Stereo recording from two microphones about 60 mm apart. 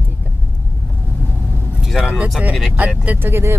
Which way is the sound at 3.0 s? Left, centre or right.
Right.